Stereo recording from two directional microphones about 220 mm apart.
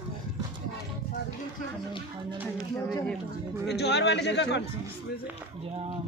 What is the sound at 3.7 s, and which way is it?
Speech, 50° left (ahead or behind).